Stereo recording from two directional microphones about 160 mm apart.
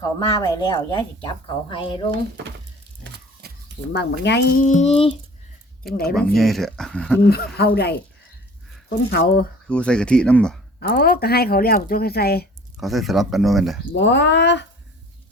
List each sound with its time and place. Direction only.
0.0 s speech: 20° left (ahead or behind)
3.4 s a sound: 85° right
3.9 s speech: 90° left
4.6 s a child's voice: 50° left (ahead or behind)
6.1 s speech: 5° left (ahead or behind)
7.3 s speech: 80° left
9.0 s speech: 75° left (ahead or behind)
9.6 s speech: 5° left (ahead or behind)
10.8 s speech: 75° left (ahead or behind)
12.7 s speech: centre (ahead or behind)
13.9 s speech: 90° left